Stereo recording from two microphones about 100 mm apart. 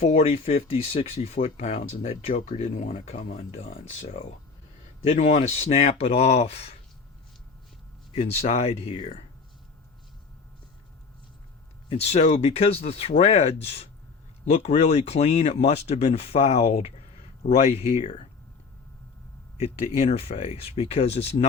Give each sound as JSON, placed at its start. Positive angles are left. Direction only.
{"t": 0.1, "sound": "speech", "side_deg": 90}
{"t": 8.1, "sound": "speech", "side_deg": 85}
{"t": 11.9, "sound": "speech", "side_deg": 90}
{"t": 20.0, "sound": "speech", "side_deg": 90}